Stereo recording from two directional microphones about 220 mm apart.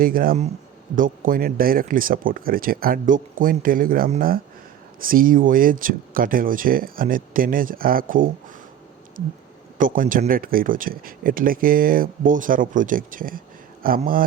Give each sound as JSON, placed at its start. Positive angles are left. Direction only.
{"t": 0.0, "sound": "speech", "side_deg": -40}
{"t": 9.7, "sound": "speech", "side_deg": -40}